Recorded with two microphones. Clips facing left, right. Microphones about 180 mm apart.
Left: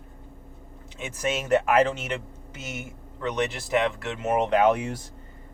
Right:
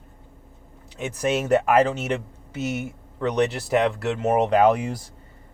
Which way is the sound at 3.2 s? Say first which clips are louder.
Right 5 dB; 35° right (ahead or behind).